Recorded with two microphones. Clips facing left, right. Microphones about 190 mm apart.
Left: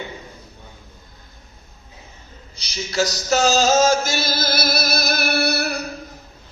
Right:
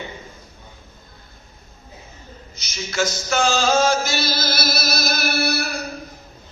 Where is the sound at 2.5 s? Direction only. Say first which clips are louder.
Left 3 dB; 35° left (ahead or behind); by 5.7 s 60° left (ahead or behind).